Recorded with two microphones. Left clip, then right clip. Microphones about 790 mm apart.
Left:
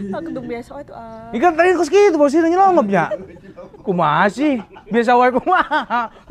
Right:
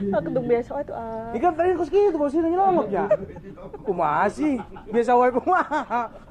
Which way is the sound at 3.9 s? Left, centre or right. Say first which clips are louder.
Left 6 dB; left.